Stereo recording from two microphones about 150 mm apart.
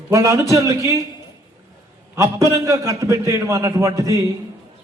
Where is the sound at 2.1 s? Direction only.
20° right (ahead or behind).